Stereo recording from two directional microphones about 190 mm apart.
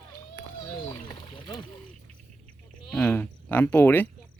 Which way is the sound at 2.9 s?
10° left (ahead or behind).